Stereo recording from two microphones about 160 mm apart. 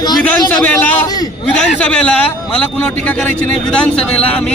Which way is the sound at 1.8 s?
5° left (ahead or behind).